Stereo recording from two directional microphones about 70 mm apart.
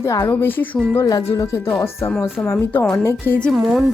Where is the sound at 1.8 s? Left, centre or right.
Left.